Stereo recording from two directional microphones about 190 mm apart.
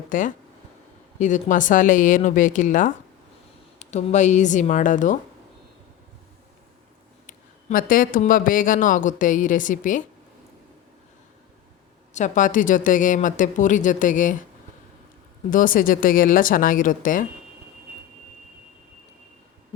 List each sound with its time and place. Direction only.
0.1 s speech: 45° left (ahead or behind)
7.3 s speech: 45° left (ahead or behind)
12.1 s speech: 40° left (ahead or behind)
15.4 s speech: 45° left (ahead or behind)